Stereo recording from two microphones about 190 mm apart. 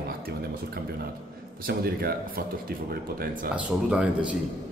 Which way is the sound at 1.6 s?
50° right (ahead or behind).